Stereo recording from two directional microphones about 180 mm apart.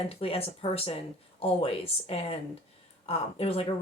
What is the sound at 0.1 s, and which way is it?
Speech, 30° left (ahead or behind).